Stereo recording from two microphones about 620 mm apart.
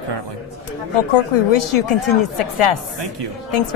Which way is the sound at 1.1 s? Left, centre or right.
Left.